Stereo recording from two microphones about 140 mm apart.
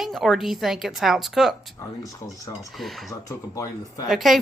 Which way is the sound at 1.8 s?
25° left (ahead or behind).